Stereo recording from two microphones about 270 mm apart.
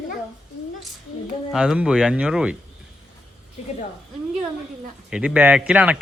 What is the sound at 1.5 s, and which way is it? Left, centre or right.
Speech, centre.